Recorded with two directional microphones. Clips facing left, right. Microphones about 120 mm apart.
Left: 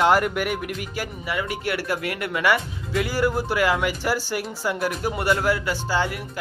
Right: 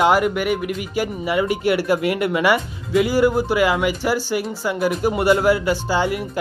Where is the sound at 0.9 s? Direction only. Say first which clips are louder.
Right 9 dB; 20° right (ahead or behind).